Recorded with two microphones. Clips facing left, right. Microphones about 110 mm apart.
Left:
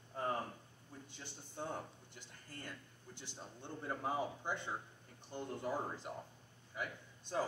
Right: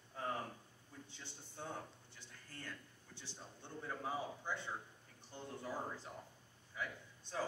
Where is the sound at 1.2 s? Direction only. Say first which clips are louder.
Left 5 dB; 15° left (ahead or behind).